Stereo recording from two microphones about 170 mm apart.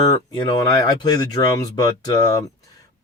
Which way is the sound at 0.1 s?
25° left (ahead or behind).